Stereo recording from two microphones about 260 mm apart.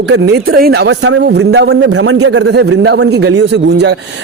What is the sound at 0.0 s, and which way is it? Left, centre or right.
Speech, right.